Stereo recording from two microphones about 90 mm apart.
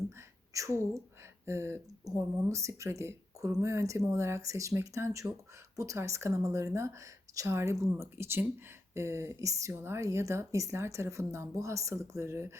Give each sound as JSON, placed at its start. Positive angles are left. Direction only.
{"t": 0.5, "sound": "speech", "side_deg": -35}